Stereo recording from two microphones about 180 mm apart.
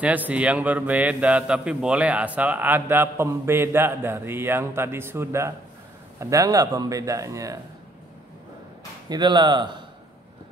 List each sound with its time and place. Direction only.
0.0 s a man's voice: 10° right (ahead or behind)
9.1 s a man's voice: 25° right (ahead or behind)